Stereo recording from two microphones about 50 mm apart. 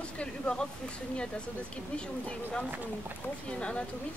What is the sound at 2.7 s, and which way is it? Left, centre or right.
Speech, right.